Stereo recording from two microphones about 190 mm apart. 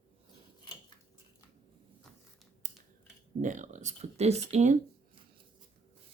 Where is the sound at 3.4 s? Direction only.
40° right (ahead or behind).